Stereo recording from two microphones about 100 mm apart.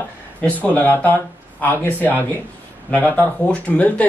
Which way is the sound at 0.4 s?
15° left (ahead or behind).